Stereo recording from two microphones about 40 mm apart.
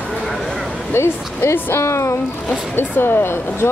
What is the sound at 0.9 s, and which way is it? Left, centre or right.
Speech, left.